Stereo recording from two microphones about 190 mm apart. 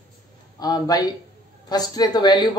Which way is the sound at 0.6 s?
20° left (ahead or behind).